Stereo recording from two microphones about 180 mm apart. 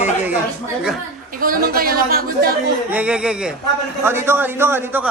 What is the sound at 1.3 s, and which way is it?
Speech, 50° right (ahead or behind).